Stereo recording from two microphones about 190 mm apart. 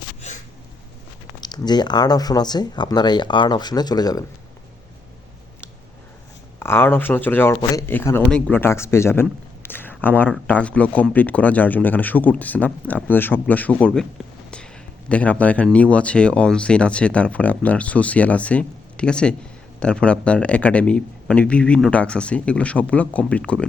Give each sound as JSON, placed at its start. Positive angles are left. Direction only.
{"t": 1.4, "sound": "speech", "side_deg": 20}
{"t": 6.6, "sound": "speech", "side_deg": 10}
{"t": 9.6, "sound": "a sound", "side_deg": 10}
{"t": 10.4, "sound": "speech", "side_deg": 5}
{"t": 15.1, "sound": "speech", "side_deg": 5}